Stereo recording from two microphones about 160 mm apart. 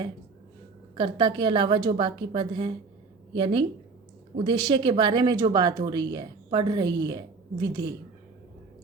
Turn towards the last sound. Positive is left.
turn(degrees=-25)  # may be behind; listen again after turning